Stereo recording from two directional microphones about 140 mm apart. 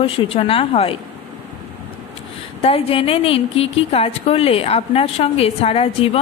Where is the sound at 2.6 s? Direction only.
45° left (ahead or behind).